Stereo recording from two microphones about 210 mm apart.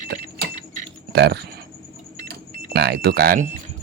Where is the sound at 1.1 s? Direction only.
55° right (ahead or behind).